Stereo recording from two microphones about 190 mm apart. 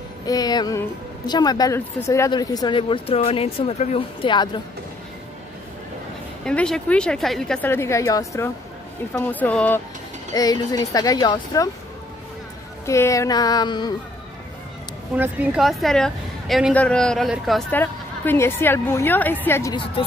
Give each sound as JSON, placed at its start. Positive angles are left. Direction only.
{"t": 0.3, "sound": "a woman's voice", "side_deg": 20}
{"t": 6.4, "sound": "a woman's voice", "side_deg": 5}
{"t": 10.3, "sound": "a woman's voice", "side_deg": 20}
{"t": 12.8, "sound": "a woman's voice", "side_deg": 15}
{"t": 15.1, "sound": "a woman's voice", "side_deg": -5}
{"t": 19.7, "sound": "a woman's voice", "side_deg": 25}